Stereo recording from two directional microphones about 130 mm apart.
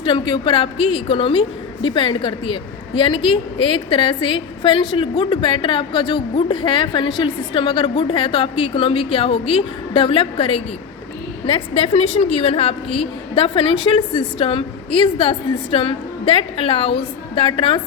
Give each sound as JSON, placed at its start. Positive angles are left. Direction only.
{"t": 0.0, "sound": "a woman's voice", "side_deg": 40}